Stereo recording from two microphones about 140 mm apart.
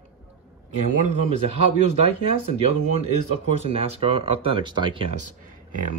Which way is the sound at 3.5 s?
50° right (ahead or behind).